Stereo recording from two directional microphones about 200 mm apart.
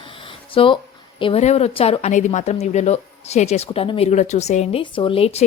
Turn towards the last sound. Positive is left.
turn(degrees=30)  # may be behind; listen again after turning